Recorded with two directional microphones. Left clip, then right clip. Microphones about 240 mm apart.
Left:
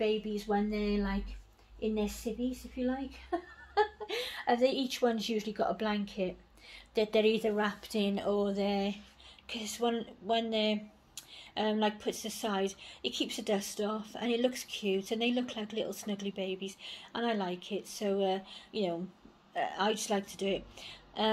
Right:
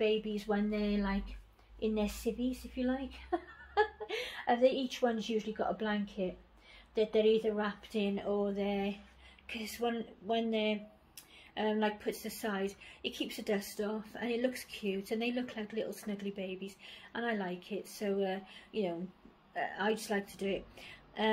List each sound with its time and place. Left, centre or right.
0.0 s speech: centre
2.3 s a woman's voice: centre